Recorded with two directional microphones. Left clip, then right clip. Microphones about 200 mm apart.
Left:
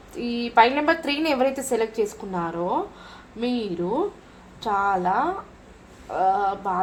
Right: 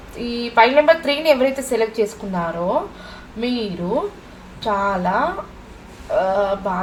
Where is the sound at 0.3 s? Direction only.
40° left (ahead or behind).